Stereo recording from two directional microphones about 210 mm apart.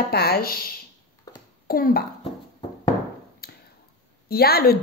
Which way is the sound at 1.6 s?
45° left (ahead or behind).